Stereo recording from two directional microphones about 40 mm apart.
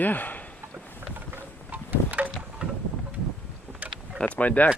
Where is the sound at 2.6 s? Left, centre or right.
Right.